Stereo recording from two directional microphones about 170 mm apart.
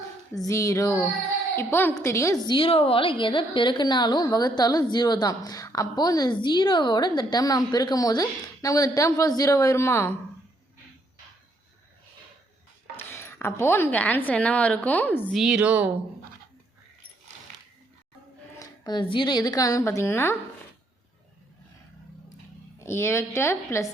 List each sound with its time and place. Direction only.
0.4 s a woman's voice: 20° left (ahead or behind)
13.1 s a woman's voice: 15° left (ahead or behind)
15.4 s speech: 5° right (ahead or behind)
18.6 s a woman's voice: 25° left (ahead or behind)
22.8 s a woman's voice: 15° left (ahead or behind)